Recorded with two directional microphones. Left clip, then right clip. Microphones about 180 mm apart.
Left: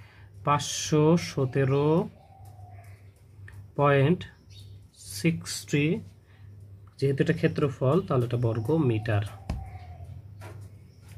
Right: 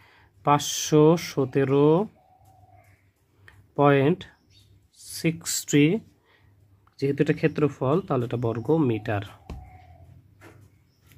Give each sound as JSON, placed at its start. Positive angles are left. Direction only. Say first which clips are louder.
{"t": 0.0, "sound": "speech", "louder": "right 4 dB", "side_deg": -45}
{"t": 3.4, "sound": "tick-tock", "louder": "right 4 dB", "side_deg": -45}
{"t": 4.9, "sound": "speech", "louder": "right 2 dB", "side_deg": -45}
{"t": 7.0, "sound": "speech", "louder": "right 2 dB", "side_deg": -50}